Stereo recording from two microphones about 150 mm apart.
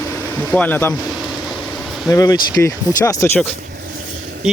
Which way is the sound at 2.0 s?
25° left (ahead or behind).